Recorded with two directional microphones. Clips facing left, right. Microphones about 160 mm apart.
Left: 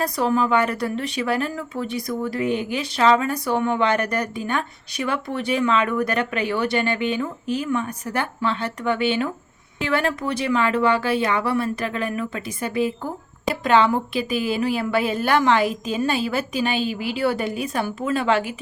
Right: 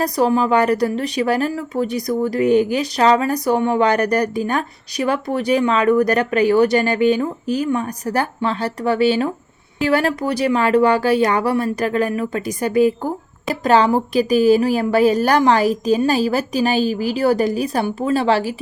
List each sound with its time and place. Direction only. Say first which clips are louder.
0.0 s speech: right 4 dB; 35° right (ahead or behind)